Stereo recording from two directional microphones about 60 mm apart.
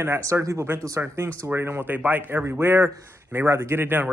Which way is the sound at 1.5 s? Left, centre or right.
Right.